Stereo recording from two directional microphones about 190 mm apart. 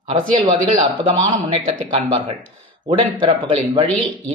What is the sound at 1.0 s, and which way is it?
A man's voice, 25° right (ahead or behind).